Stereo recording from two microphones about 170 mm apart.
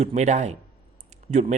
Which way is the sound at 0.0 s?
40° right (ahead or behind).